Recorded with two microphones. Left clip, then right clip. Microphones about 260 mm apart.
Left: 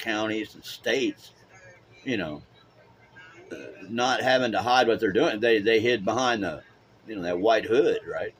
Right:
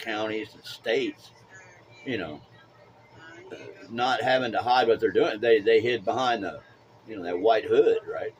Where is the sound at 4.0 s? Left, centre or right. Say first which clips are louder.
Left 1 dB; left.